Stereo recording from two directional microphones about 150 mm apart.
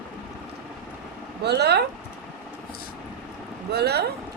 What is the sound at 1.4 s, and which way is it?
Speech, 90° right.